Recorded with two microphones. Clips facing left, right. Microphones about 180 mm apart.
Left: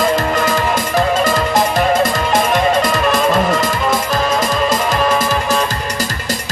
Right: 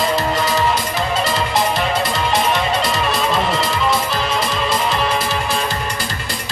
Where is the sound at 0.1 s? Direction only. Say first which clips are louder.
Left 3 dB; 50° left (ahead or behind).